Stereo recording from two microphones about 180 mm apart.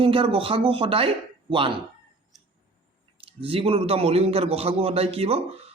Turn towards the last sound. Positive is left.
turn(degrees=-35)  # may be behind; listen again after turning